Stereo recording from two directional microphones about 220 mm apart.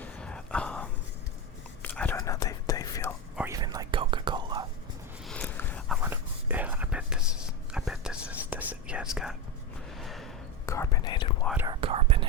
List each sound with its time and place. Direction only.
0.0 s whispering: 5° left (ahead or behind)
3.3 s whispering: 10° right (ahead or behind)
5.2 s a sound: 5° left (ahead or behind)
6.0 s whispering: 10° right (ahead or behind)
10.0 s a sound: centre (ahead or behind)
10.7 s whispering: 15° left (ahead or behind)
11.5 s whispering: 20° right (ahead or behind)